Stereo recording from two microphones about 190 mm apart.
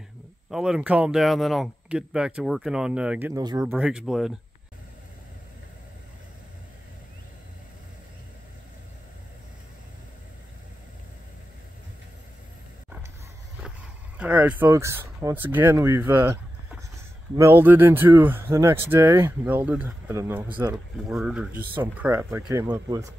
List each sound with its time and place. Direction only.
0.5 s speech: 5° right (ahead or behind); by 3.7 s 20° right (ahead or behind)
3.7 s speech: 5° right (ahead or behind)
13.6 s speech: 5° right (ahead or behind)
17.4 s speech: 10° right (ahead or behind)